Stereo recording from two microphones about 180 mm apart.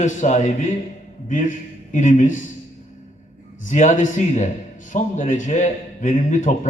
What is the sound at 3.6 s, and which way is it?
A man's voice, 45° left (ahead or behind).